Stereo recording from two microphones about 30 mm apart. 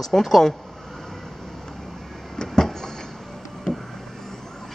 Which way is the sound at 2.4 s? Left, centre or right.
Centre.